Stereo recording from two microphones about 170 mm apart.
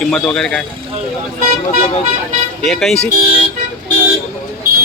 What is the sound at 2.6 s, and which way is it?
Speech, centre (ahead or behind).